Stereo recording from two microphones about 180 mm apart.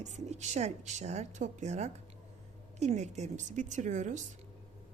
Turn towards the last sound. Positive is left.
turn(degrees=-40)  # may be behind; listen again after turning